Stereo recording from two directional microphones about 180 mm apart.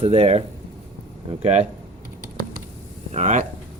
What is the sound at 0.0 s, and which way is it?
Speech, 35° right (ahead or behind).